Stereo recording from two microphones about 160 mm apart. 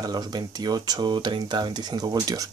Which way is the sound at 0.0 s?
25° right (ahead or behind).